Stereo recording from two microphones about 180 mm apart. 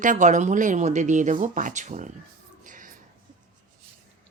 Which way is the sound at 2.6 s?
45° right (ahead or behind).